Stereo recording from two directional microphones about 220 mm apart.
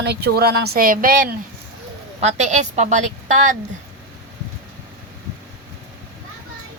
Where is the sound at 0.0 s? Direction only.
45° right (ahead or behind).